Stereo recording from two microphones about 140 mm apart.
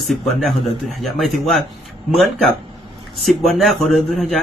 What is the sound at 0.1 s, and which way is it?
Speech, centre (ahead or behind).